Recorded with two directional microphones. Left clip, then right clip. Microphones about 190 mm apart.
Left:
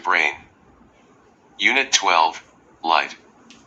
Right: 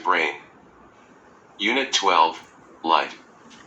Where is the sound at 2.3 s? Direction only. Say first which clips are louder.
Left 2 dB; 65° left (ahead or behind).